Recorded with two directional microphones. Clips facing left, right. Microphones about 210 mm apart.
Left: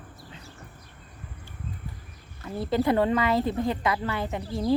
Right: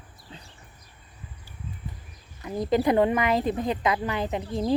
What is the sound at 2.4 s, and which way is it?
Speech, 15° right (ahead or behind).